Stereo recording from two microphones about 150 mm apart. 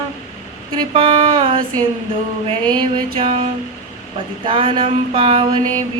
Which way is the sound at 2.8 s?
35° right (ahead or behind).